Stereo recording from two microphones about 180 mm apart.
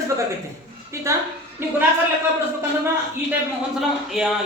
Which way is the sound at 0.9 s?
15° right (ahead or behind).